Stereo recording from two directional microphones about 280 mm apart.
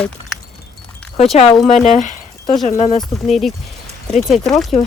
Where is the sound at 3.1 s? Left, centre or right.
Centre.